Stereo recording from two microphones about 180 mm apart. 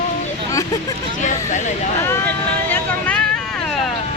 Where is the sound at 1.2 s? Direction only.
40° left (ahead or behind).